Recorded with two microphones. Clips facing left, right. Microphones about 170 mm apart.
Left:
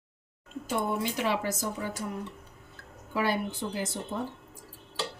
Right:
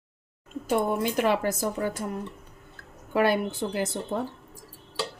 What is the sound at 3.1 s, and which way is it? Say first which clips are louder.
Speech: right 6 dB; 60° right (ahead or behind).